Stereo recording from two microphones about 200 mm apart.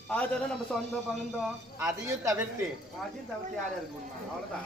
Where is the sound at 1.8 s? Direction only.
15° right (ahead or behind).